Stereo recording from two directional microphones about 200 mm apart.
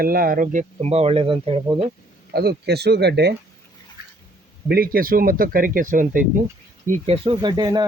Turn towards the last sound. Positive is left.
turn(degrees=-20)  # may be behind; listen again after turning